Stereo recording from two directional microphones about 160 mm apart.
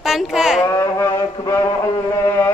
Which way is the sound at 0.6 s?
15° left (ahead or behind).